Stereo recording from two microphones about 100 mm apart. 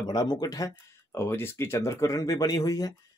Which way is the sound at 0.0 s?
40° left (ahead or behind).